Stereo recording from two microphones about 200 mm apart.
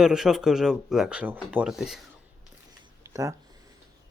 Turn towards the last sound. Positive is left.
turn(degrees=-15)  # may be behind; listen again after turning